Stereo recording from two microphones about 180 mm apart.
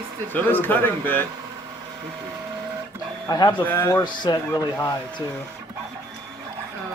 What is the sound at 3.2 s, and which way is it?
Speech, 20° left (ahead or behind).